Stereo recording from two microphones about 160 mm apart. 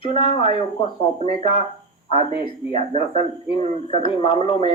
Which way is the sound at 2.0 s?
35° left (ahead or behind).